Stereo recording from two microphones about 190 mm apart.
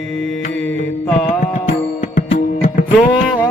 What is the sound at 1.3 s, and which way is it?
Music, 40° left (ahead or behind).